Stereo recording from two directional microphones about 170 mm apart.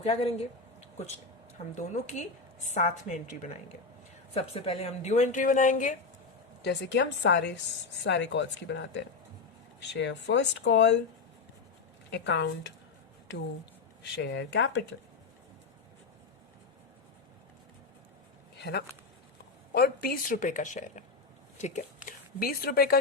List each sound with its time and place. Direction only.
0.0 s speech: 35° left (ahead or behind)
4.4 s speech: 35° left (ahead or behind)
6.6 s speech: 85° left
12.1 s speech: 90° left
14.0 s speech: 90° left
18.5 s a sound: 75° left (ahead or behind)
19.7 s a woman's voice: 65° left (ahead or behind)